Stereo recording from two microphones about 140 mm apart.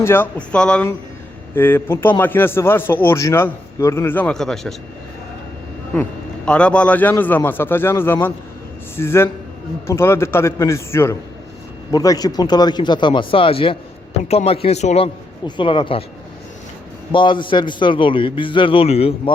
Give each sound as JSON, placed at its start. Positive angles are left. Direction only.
{"t": 0.0, "sound": "speech", "side_deg": 15}
{"t": 5.9, "sound": "a man's voice", "side_deg": 10}
{"t": 15.4, "sound": "a man's voice", "side_deg": 35}
{"t": 17.1, "sound": "a man's voice", "side_deg": 35}